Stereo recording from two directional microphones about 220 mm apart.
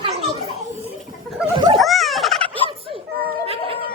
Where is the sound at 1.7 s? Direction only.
Centre (ahead or behind).